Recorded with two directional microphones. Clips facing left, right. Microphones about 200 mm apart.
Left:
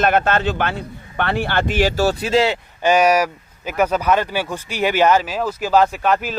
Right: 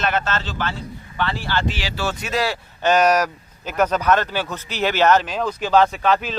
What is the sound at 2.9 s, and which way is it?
Speech, 10° left (ahead or behind).